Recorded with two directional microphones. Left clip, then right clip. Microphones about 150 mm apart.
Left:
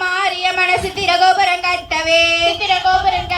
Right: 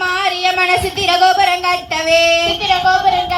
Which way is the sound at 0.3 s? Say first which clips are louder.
Right 3 dB; 35° left (ahead or behind).